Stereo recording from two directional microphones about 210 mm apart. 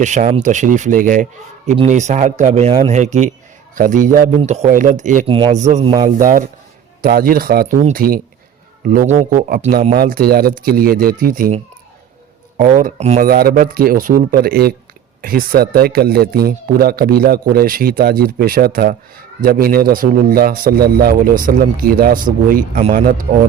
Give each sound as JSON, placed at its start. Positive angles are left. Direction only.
{"t": 0.0, "sound": "a man's voice", "side_deg": -35}
{"t": 7.0, "sound": "a man's voice", "side_deg": -45}
{"t": 13.2, "sound": "a man's voice", "side_deg": -45}